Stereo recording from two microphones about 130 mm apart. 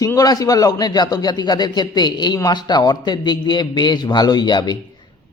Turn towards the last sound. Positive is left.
turn(degrees=35)  # may be behind; listen again after turning